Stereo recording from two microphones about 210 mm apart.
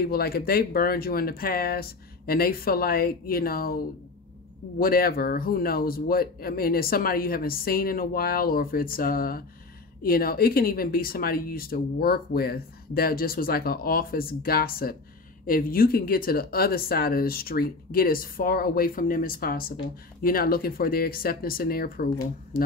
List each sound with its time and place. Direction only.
0.0 s speech: 45° left (ahead or behind)